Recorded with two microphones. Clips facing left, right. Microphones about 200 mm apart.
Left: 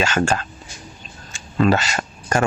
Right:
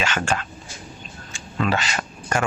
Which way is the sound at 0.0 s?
40° left (ahead or behind).